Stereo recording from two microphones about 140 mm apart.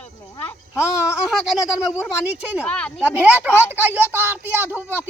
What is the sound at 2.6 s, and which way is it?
Speech, 10° left (ahead or behind).